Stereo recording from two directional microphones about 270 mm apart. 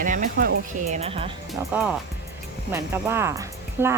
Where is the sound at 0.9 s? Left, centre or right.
Right.